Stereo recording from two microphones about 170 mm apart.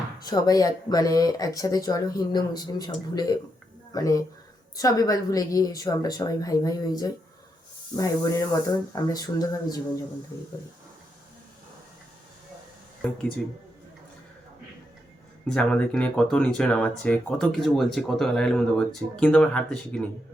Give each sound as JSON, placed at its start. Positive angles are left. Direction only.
{"t": 0.3, "sound": "speech", "side_deg": 20}
{"t": 15.4, "sound": "speech", "side_deg": 5}